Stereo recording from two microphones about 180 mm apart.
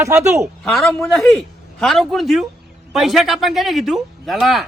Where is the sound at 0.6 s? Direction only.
Centre (ahead or behind).